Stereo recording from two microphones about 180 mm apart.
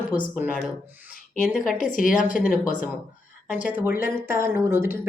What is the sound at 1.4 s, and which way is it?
Speech, centre (ahead or behind).